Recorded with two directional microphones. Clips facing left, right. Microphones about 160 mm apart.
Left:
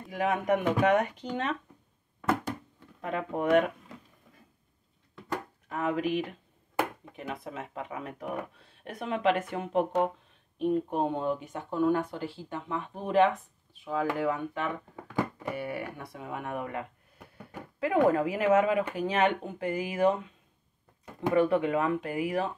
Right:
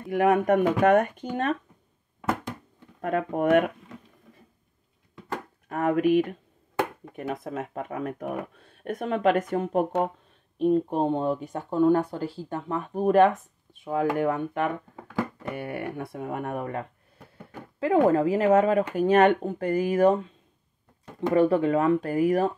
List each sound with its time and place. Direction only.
0.1 s speech: 55° right (ahead or behind)
3.0 s speech: 55° right (ahead or behind)
5.7 s speech: 55° right (ahead or behind)
10.6 s speech: 30° right (ahead or behind)
17.7 s speech: 30° right (ahead or behind)
18.9 s speech: 50° right (ahead or behind)
21.4 s speech: 35° right (ahead or behind)